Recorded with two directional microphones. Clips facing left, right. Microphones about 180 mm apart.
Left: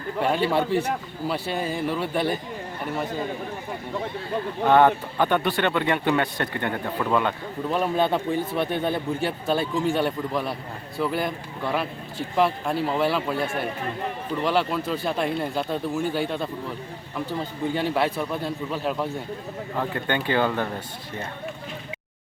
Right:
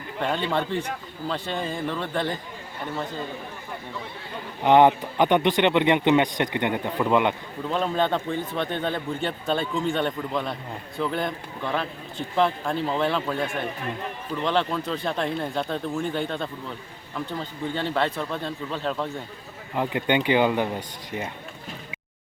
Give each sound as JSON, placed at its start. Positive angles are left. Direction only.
{"t": 0.2, "sound": "speech", "side_deg": 10}
{"t": 4.6, "sound": "speech", "side_deg": -15}
{"t": 7.7, "sound": "speech", "side_deg": 10}
{"t": 17.7, "sound": "speech", "side_deg": 10}
{"t": 19.7, "sound": "speech", "side_deg": -15}